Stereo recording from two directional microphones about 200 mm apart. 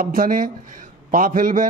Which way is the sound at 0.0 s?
45° right (ahead or behind).